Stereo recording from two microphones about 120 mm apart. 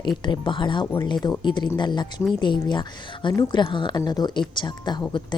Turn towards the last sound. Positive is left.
turn(degrees=40)  # may be behind; listen again after turning